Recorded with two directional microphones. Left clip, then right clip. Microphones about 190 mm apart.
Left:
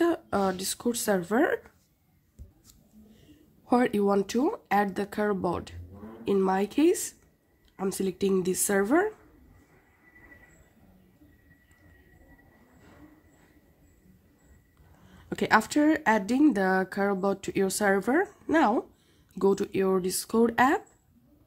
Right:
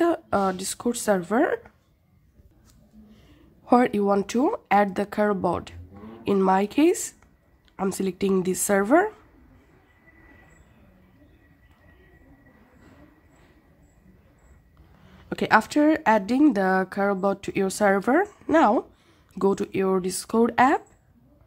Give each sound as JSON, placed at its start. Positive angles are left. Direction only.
{"t": 0.0, "sound": "speech", "side_deg": -10}
{"t": 3.6, "sound": "speech", "side_deg": -15}
{"t": 15.2, "sound": "speech", "side_deg": -10}